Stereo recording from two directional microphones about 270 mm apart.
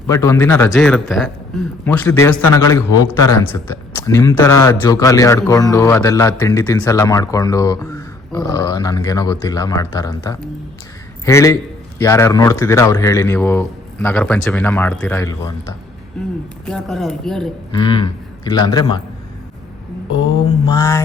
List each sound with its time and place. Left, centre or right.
0.1 s a man's voice: centre
16.2 s speech: centre
17.7 s speech: centre
20.7 s a man's voice: centre